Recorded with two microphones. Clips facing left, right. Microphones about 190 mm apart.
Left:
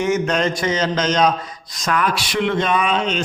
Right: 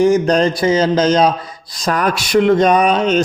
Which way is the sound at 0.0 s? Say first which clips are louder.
Right 7 dB; 35° right (ahead or behind).